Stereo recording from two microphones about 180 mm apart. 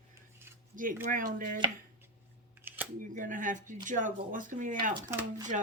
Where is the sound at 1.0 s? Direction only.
45° right (ahead or behind).